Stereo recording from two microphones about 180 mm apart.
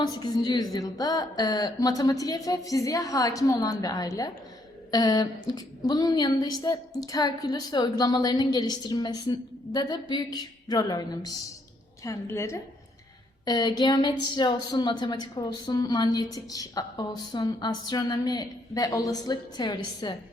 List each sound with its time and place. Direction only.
0.0 s a woman's voice: 25° left (ahead or behind)